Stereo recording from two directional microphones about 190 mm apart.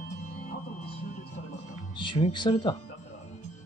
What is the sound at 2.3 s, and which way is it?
Speech, 25° left (ahead or behind).